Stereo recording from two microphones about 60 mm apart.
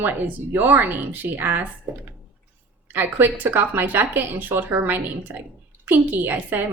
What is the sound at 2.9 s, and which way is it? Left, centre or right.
Speech, right.